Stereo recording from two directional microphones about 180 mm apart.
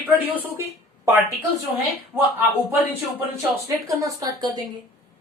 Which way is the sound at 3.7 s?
15° right (ahead or behind).